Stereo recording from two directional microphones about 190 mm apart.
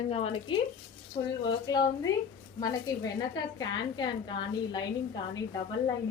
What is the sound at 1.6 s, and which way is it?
Speech, 20° left (ahead or behind).